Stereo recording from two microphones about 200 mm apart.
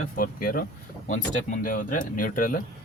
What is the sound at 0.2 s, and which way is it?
Speech, 45° left (ahead or behind).